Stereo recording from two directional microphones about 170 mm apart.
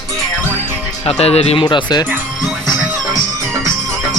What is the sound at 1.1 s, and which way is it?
Speech, 35° left (ahead or behind).